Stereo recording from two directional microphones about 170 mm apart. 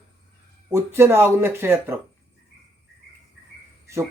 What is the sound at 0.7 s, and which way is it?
Speech, 15° right (ahead or behind).